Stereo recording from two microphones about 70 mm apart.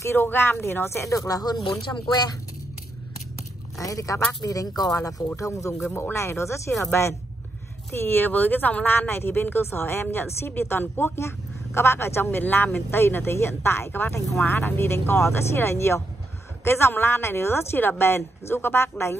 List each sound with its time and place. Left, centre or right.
0.0 s speech: left
3.7 s speech: left
4.4 s speech: left
5.3 s speech: left